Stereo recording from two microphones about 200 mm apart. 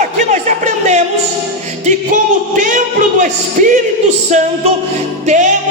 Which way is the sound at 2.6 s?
40° right (ahead or behind).